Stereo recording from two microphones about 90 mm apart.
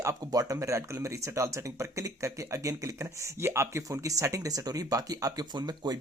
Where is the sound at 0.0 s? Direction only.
40° right (ahead or behind).